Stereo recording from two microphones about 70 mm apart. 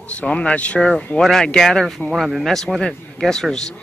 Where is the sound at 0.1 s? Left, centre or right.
Centre.